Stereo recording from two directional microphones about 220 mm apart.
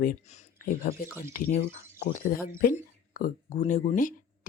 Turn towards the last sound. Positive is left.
turn(degrees=35)  # may be behind; listen again after turning